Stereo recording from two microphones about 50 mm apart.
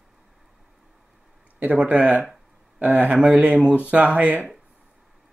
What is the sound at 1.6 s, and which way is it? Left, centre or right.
Speech, right.